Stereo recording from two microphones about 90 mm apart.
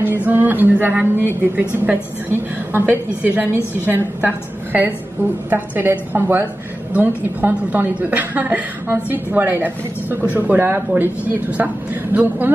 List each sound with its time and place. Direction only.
0.0 s a woman's voice: 20° right (ahead or behind)
5.5 s a woman's voice: 25° right (ahead or behind)